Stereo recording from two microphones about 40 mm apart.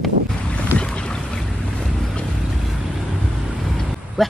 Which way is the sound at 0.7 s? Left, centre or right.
Left.